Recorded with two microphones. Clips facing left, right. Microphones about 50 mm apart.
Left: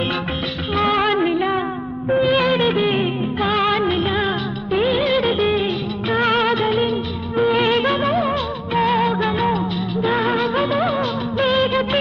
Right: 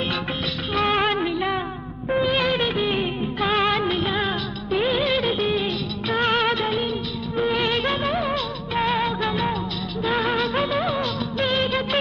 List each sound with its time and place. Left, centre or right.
1.4 s a sound: left
2.0 s music: centre
3.4 s music of bollywood: centre
4.9 s music: centre
6.3 s music of bollywood: centre
7.3 s music: centre